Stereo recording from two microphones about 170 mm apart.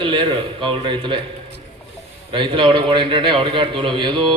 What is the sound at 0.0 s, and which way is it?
Speech, 30° right (ahead or behind).